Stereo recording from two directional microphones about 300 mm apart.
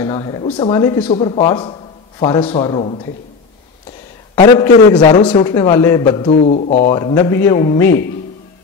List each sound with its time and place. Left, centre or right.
0.0 s a man's voice: centre
4.4 s a man's voice: centre